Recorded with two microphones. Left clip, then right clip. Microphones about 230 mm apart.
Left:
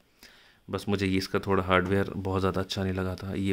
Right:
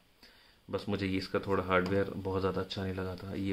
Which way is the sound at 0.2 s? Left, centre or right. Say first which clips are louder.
Left 6 dB; left.